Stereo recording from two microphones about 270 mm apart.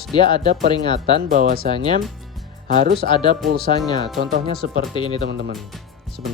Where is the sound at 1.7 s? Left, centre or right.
Centre.